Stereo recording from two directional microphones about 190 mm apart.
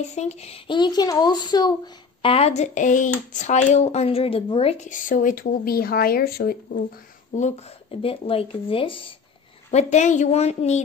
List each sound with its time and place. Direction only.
0.1 s speech: 35° left (ahead or behind)
2.2 s a woman's voice: 30° left (ahead or behind); by 6.8 s 55° left (ahead or behind)
7.3 s a woman's voice: 35° left (ahead or behind)